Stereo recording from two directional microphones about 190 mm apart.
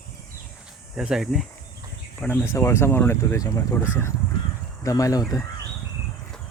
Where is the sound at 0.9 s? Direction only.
5° right (ahead or behind); by 3.8 s 15° left (ahead or behind).